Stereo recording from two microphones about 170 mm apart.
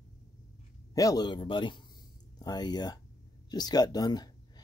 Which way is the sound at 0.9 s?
20° left (ahead or behind).